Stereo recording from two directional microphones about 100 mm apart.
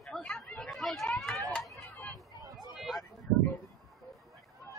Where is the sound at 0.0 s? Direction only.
5° left (ahead or behind).